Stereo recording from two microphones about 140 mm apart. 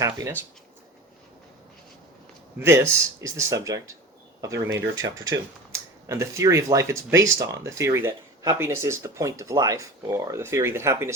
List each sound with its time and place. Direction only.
2.6 s speech: 20° right (ahead or behind)